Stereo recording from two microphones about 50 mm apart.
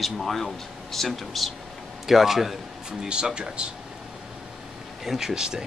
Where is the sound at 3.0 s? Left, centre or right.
Centre.